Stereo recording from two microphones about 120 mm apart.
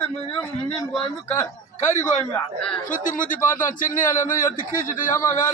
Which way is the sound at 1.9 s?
90° left.